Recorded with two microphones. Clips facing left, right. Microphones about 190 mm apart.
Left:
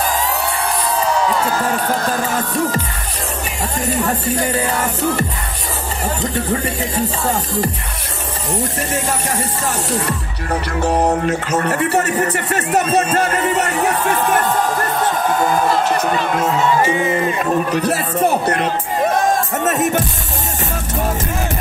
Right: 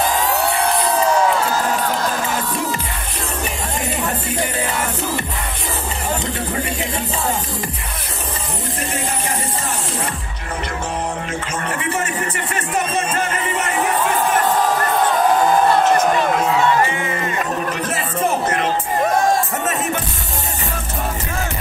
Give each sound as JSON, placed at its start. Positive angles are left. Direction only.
{"t": 2.1, "sound": "music", "side_deg": 50}
{"t": 10.8, "sound": "speech", "side_deg": 40}
{"t": 16.8, "sound": "speech", "side_deg": 20}
{"t": 17.8, "sound": "speech", "side_deg": 35}
{"t": 19.6, "sound": "speech", "side_deg": 40}